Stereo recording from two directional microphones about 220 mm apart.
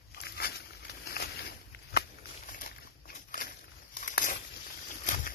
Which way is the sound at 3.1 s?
40° left (ahead or behind).